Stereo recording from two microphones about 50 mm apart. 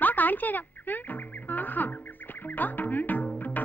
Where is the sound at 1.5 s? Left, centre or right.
Left.